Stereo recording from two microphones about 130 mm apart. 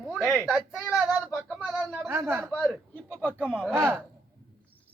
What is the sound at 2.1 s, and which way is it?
Speech, 20° right (ahead or behind).